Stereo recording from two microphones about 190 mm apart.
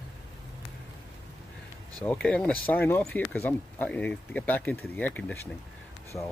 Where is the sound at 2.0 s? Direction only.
5° left (ahead or behind).